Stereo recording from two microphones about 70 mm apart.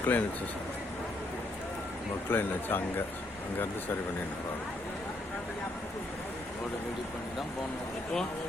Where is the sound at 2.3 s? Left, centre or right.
Left.